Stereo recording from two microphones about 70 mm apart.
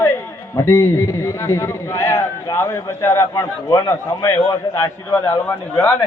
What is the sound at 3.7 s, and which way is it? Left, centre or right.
A man's voice, left.